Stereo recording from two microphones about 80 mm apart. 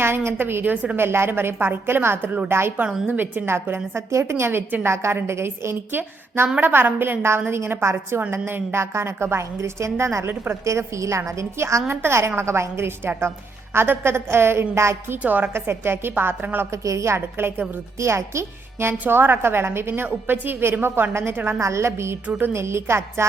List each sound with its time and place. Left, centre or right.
0.3 s a woman's voice: right
0.9 s a woman's voice: right
10.2 s a woman's voice: right
15.2 s a woman's voice: right
16.7 s a woman's voice: right